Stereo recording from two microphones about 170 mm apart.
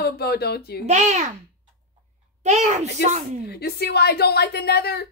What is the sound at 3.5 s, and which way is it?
A woman's voice, 70° left (ahead or behind).